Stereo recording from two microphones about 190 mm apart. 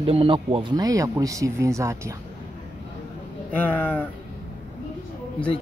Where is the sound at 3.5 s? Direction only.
10° left (ahead or behind).